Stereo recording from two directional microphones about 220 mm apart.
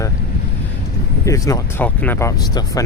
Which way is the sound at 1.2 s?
15° left (ahead or behind).